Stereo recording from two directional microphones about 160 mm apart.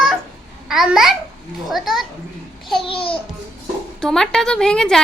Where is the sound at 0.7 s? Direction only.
Centre (ahead or behind).